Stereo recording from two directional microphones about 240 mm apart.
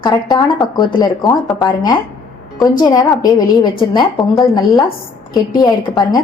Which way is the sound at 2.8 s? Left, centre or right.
Centre.